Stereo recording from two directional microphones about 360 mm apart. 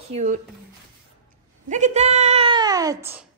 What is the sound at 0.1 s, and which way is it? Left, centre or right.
Speech, centre.